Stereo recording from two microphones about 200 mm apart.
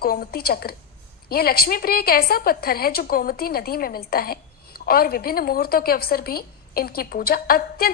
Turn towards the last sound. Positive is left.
turn(degrees=50)  # may be behind; listen again after turning